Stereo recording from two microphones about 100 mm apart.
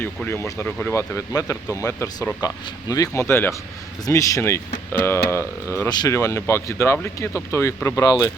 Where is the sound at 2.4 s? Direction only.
40° left (ahead or behind).